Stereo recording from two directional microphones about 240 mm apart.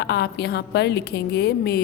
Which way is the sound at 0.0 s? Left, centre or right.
Left.